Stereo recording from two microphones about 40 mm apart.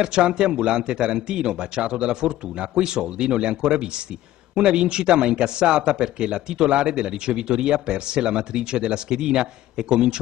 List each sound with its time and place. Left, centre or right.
0.0 s a man's voice: right